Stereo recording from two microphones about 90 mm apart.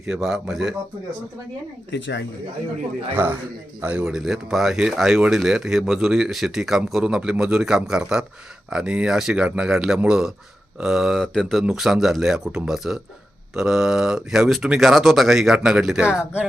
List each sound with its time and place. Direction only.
0.0 s speech: 5° right (ahead or behind)
3.1 s a man's voice: 20° right (ahead or behind)
4.0 s speech: 5° right (ahead or behind)